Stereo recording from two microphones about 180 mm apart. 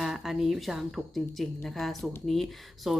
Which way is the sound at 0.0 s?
Centre (ahead or behind).